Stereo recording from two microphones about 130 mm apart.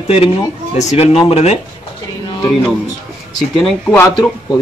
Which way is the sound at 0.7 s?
60° left (ahead or behind).